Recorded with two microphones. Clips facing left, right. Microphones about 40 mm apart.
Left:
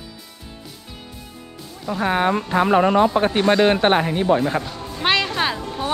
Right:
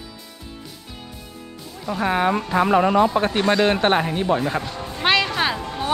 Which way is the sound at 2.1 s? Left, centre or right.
Left.